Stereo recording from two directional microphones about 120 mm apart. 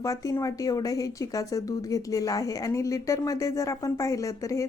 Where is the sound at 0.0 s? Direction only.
25° left (ahead or behind).